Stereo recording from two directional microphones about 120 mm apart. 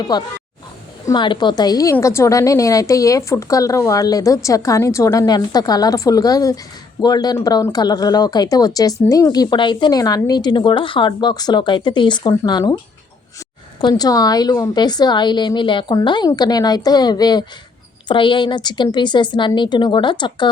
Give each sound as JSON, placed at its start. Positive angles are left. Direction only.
{"t": 0.1, "sound": "a woman's voice", "side_deg": 35}
{"t": 13.8, "sound": "a woman's voice", "side_deg": 35}